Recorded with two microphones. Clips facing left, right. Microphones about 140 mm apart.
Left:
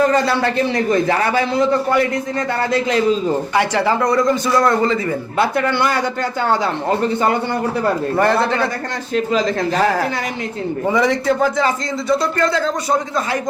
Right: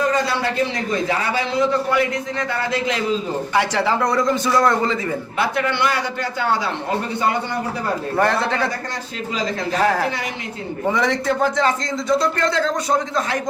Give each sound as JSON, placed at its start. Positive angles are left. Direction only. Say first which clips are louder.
{"t": 0.9, "sound": "a man's voice", "louder": "left 5 dB", "side_deg": 55}
{"t": 3.5, "sound": "a man's voice", "louder": "even", "side_deg": 0}
{"t": 5.5, "sound": "a man's voice", "louder": "left 3 dB", "side_deg": 45}
{"t": 8.1, "sound": "a man's voice", "louder": "left 1 dB", "side_deg": 0}
{"t": 10.9, "sound": "a man's voice", "louder": "left 4 dB", "side_deg": 0}